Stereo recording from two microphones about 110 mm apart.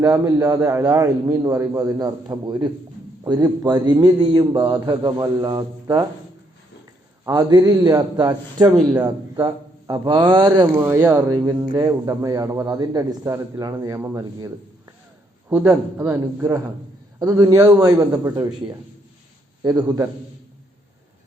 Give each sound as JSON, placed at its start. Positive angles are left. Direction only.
{"t": 0.0, "sound": "a man's voice", "side_deg": -30}
{"t": 7.3, "sound": "a man's voice", "side_deg": -35}
{"t": 10.7, "sound": "a man's voice", "side_deg": -15}
{"t": 11.7, "sound": "a man's voice", "side_deg": -35}
{"t": 15.4, "sound": "a man's voice", "side_deg": -20}
{"t": 17.2, "sound": "a man's voice", "side_deg": -35}
{"t": 19.6, "sound": "a man's voice", "side_deg": -35}